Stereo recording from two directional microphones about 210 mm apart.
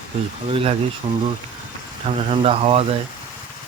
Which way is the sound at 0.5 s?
25° right (ahead or behind).